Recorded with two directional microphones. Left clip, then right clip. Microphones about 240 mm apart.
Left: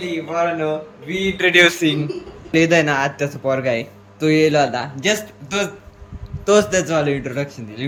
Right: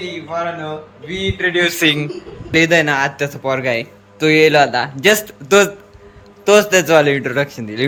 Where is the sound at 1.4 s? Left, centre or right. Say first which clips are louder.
Left 4 dB; left.